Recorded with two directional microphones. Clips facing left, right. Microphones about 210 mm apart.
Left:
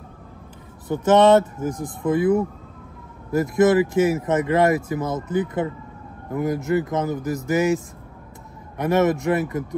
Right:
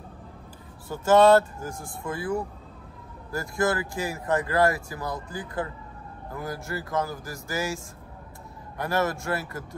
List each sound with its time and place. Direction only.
0.8 s speech: 20° left (ahead or behind)